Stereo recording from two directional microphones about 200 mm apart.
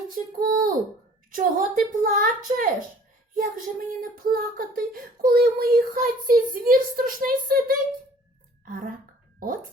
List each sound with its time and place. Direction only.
0.1 s speech: 45° right (ahead or behind)